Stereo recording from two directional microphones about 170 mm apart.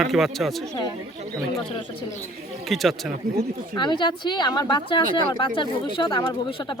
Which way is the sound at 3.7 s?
25° left (ahead or behind).